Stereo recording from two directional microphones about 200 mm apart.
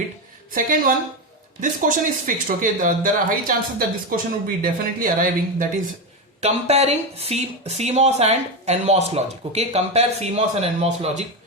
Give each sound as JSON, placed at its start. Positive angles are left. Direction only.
{"t": 0.5, "sound": "speech", "side_deg": -45}
{"t": 6.4, "sound": "speech", "side_deg": -30}